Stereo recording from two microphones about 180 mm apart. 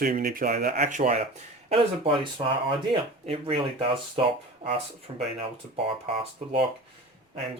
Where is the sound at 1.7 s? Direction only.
30° right (ahead or behind).